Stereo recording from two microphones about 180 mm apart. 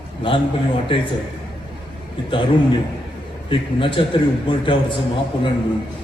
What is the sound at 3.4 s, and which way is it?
A man's voice, 30° left (ahead or behind).